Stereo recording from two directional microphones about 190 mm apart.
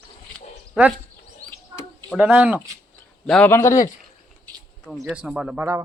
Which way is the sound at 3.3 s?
10° left (ahead or behind).